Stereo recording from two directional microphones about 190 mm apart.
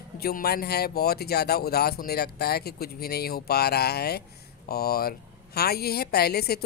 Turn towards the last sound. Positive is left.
turn(degrees=55)  # may be behind; listen again after turning